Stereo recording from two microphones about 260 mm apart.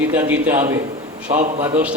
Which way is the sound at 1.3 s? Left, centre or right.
Right.